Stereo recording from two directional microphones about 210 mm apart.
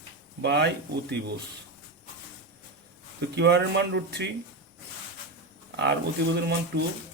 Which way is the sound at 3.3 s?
55° right (ahead or behind).